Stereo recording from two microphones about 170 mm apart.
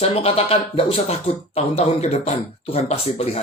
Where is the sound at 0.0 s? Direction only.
35° left (ahead or behind).